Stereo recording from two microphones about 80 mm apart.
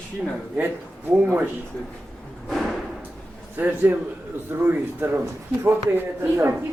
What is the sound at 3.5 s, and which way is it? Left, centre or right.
Speech, right.